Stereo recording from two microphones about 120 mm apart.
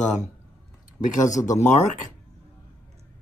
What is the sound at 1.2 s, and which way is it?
Speech, 90° left.